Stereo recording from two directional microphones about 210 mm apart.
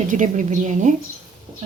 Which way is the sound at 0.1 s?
35° right (ahead or behind).